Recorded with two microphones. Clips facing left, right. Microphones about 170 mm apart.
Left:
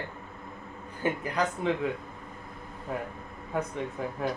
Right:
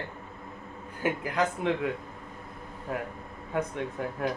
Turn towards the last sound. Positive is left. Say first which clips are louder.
# right 1 dB
turn(degrees=0)  # may be behind; listen again after turning